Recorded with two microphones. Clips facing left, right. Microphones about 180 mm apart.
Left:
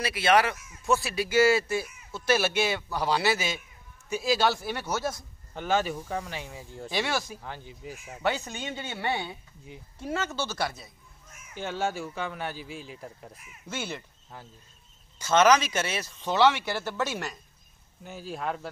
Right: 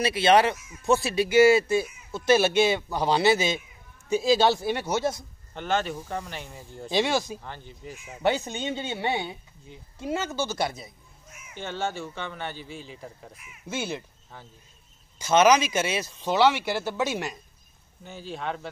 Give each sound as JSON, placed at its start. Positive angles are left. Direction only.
{"t": 0.0, "sound": "speech", "side_deg": -25}
{"t": 5.5, "sound": "a man's voice", "side_deg": 5}
{"t": 6.9, "sound": "speech", "side_deg": -20}
{"t": 7.3, "sound": "a man's voice", "side_deg": 5}
{"t": 8.2, "sound": "speech", "side_deg": -25}
{"t": 11.5, "sound": "a man's voice", "side_deg": 5}
{"t": 13.7, "sound": "speech", "side_deg": -15}
{"t": 15.1, "sound": "speech", "side_deg": -15}
{"t": 18.0, "sound": "a man's voice", "side_deg": 5}